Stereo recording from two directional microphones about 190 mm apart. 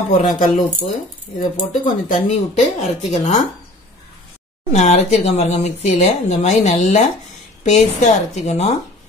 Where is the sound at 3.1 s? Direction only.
40° left (ahead or behind).